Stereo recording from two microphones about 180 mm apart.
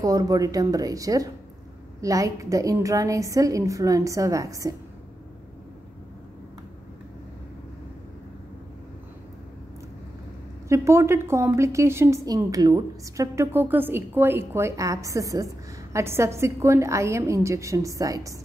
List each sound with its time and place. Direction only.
0.0 s a woman's voice: 20° right (ahead or behind)
10.7 s a woman's voice: 15° right (ahead or behind)